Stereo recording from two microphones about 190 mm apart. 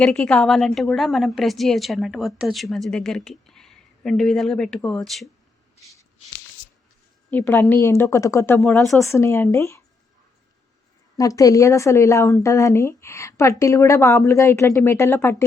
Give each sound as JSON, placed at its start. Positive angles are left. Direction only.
{"t": 0.0, "sound": "a woman's voice", "side_deg": 5}
{"t": 7.3, "sound": "speech", "side_deg": 10}
{"t": 11.2, "sound": "speech", "side_deg": 15}